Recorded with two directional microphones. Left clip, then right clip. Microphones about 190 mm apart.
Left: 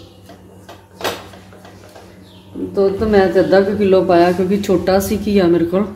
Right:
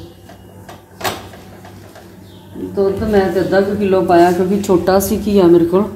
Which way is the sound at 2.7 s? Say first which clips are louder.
Left 1 dB; 25° left (ahead or behind).